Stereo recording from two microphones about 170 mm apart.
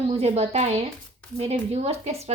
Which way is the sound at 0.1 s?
35° right (ahead or behind).